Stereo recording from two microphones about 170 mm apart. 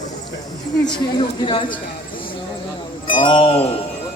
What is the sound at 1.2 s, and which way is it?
Speech, 30° left (ahead or behind).